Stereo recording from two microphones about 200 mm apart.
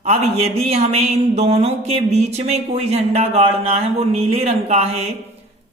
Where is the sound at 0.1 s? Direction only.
30° right (ahead or behind).